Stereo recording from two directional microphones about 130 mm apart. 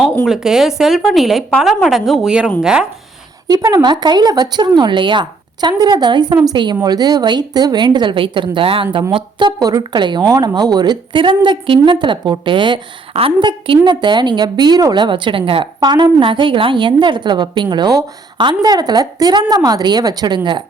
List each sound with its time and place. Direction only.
0.3 s a woman's voice: 5° right (ahead or behind)
3.4 s a woman's voice: 30° right (ahead or behind)
9.6 s a woman's voice: 30° right (ahead or behind)
15.8 s a woman's voice: 30° right (ahead or behind)